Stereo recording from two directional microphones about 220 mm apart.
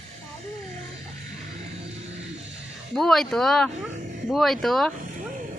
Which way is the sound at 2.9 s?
Centre (ahead or behind).